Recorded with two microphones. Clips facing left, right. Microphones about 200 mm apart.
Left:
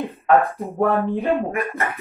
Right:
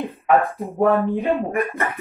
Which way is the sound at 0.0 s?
Centre (ahead or behind).